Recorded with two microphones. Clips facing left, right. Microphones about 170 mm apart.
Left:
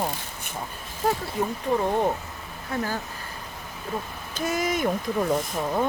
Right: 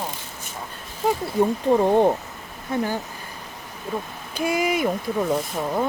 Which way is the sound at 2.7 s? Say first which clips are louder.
Right 4 dB; 20° right (ahead or behind).